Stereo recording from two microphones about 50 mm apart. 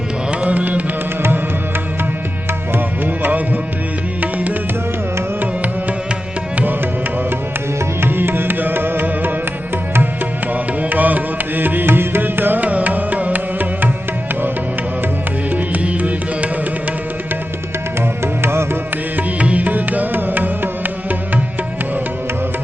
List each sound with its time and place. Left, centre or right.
0.4 s music: right
4.2 s music: right
8.0 s music: right
10.5 s music: right
15.5 s music: right
18.4 s music: right
19.1 s music: right